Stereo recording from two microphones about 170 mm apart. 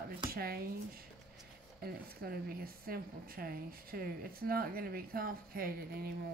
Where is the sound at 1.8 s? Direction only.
60° right (ahead or behind).